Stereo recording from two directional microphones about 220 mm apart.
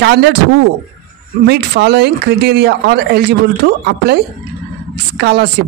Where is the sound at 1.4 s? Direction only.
50° right (ahead or behind).